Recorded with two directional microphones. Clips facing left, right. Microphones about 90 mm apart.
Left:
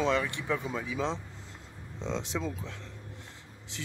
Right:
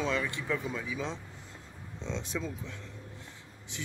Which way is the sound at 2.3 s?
25° left (ahead or behind).